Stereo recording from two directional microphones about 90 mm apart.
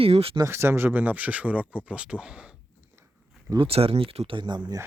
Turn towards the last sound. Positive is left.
turn(degrees=-55)  # may be behind; listen again after turning